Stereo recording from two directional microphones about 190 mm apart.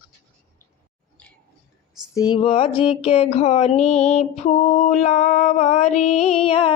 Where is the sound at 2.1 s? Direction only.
20° left (ahead or behind).